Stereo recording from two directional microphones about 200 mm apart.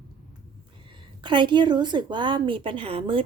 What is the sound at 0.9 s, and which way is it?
A woman's voice, 25° right (ahead or behind).